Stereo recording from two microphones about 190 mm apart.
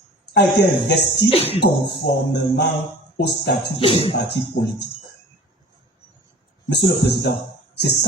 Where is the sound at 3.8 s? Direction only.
30° left (ahead or behind).